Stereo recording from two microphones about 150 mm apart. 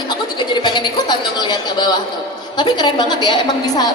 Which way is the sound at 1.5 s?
30° left (ahead or behind).